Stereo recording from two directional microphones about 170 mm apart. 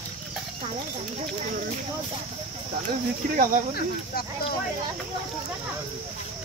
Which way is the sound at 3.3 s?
50° right (ahead or behind).